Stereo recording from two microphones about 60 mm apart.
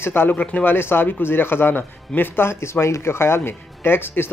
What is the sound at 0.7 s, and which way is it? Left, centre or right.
A man's voice, left.